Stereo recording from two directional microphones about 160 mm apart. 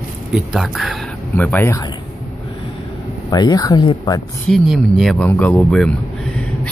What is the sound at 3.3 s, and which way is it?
Speech, 25° left (ahead or behind).